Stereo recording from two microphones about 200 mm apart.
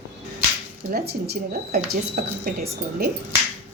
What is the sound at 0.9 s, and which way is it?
Speech, 50° right (ahead or behind).